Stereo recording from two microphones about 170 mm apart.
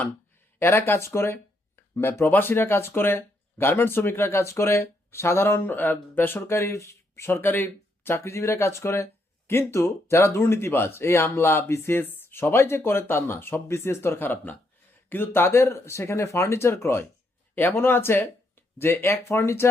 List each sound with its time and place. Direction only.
0.6 s speech: 15° left (ahead or behind)